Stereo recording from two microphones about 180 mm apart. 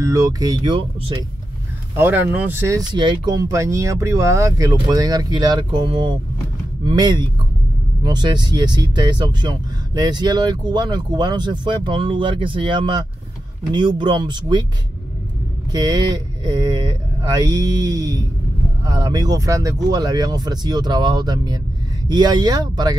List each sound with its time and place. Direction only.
0.0 s speech: 15° right (ahead or behind)
2.0 s speech: 10° right (ahead or behind); by 14.6 s 25° right (ahead or behind)
15.7 s speech: 25° right (ahead or behind)